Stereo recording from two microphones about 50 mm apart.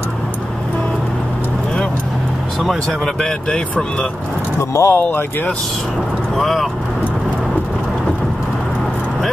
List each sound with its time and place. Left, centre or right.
2.6 s speech: centre
3.2 s speech: centre
4.6 s speech: left
6.3 s speech: centre